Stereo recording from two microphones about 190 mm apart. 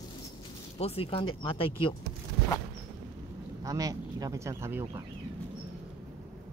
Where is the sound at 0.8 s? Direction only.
30° left (ahead or behind).